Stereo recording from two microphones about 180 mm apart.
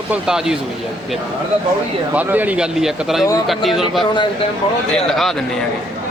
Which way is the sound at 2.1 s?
10° right (ahead or behind).